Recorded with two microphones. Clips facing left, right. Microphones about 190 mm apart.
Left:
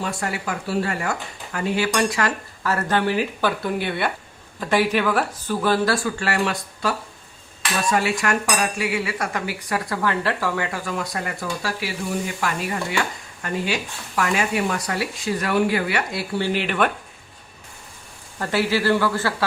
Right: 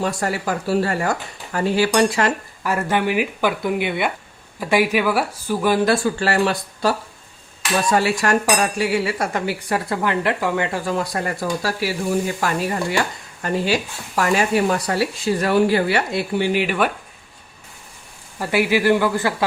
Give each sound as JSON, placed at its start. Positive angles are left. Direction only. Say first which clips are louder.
{"t": 0.0, "sound": "speech", "louder": "right 4 dB", "side_deg": -40}
{"t": 2.6, "sound": "speech", "louder": "right 1 dB", "side_deg": -15}
{"t": 14.2, "sound": "speech", "louder": "right 4 dB", "side_deg": -35}
{"t": 16.3, "sound": "speech", "louder": "right 3 dB", "side_deg": -15}
{"t": 18.3, "sound": "speech", "louder": "right 3 dB", "side_deg": -10}